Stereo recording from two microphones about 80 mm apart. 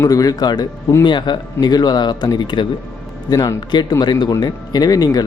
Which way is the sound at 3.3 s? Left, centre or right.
Left.